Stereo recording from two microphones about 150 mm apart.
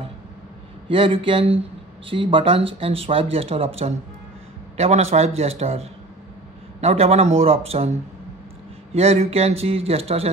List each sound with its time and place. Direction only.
0.8 s speech: 35° right (ahead or behind)